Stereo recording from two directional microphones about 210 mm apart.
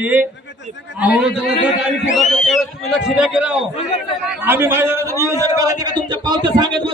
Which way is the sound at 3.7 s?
30° left (ahead or behind).